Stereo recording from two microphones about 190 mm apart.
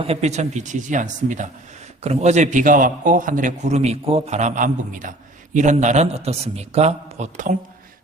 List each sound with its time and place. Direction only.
0.0 s a man's voice: 35° right (ahead or behind)